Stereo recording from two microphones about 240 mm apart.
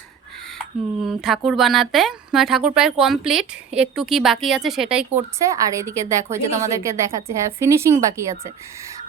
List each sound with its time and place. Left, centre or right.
1.0 s a woman's voice: centre